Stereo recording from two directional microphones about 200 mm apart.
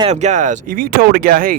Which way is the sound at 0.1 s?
35° right (ahead or behind).